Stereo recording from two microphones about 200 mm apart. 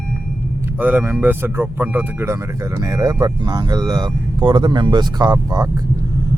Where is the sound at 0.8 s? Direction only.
10° right (ahead or behind).